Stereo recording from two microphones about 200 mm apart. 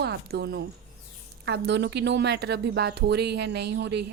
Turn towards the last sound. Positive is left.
turn(degrees=-60)  # may be behind; listen again after turning